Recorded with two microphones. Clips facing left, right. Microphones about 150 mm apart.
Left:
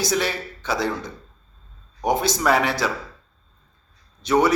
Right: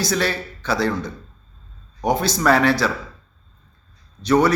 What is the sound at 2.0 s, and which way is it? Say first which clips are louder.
Speech: right 2 dB; 20° left (ahead or behind).